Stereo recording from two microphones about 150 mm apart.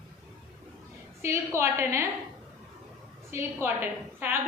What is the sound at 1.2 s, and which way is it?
Speech, 20° right (ahead or behind).